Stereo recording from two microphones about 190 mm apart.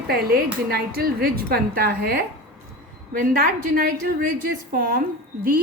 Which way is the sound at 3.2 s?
50° right (ahead or behind).